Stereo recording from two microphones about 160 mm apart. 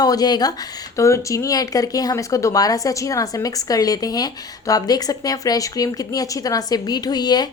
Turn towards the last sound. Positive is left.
turn(degrees=25)  # may be behind; listen again after turning